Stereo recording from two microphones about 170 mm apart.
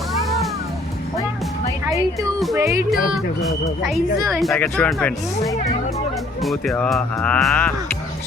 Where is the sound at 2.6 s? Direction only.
15° right (ahead or behind).